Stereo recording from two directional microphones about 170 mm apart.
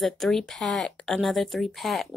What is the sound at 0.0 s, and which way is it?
Speech, centre (ahead or behind).